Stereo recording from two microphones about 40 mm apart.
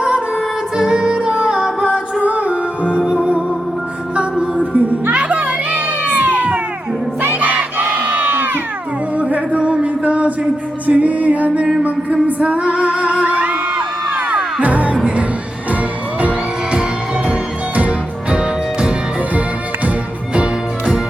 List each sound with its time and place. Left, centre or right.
0.8 s music: centre
2.2 s music: right
4.1 s a sound: right
5.1 s children playing: right
7.3 s crowd: right
9.3 s a sound: right
10.8 s music: right
17.7 s music: right
20.3 s music: right